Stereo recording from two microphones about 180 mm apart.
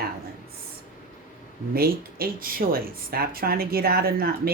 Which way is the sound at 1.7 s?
55° right (ahead or behind).